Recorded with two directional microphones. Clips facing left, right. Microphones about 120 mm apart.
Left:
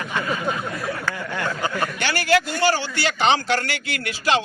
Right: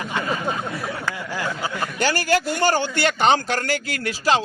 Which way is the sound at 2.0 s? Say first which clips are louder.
Right 1 dB; 40° right (ahead or behind).